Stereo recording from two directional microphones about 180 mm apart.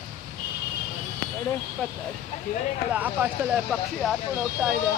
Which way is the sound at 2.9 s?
10° right (ahead or behind).